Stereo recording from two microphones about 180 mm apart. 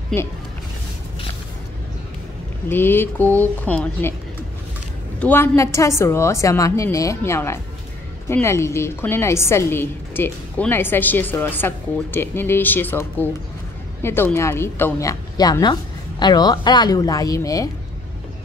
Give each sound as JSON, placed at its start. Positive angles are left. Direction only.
{"t": 2.7, "sound": "a woman's voice", "side_deg": 10}
{"t": 5.2, "sound": "a woman's voice", "side_deg": 10}